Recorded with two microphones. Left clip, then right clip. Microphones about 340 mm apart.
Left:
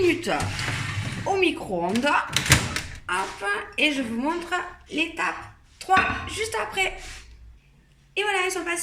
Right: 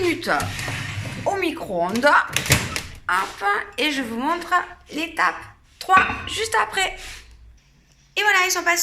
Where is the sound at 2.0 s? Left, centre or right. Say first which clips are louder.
Right 7 dB; centre.